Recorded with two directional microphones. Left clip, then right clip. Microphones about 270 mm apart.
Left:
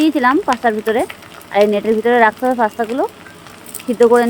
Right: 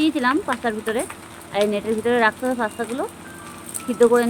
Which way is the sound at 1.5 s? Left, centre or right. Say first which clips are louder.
Left 8 dB; left.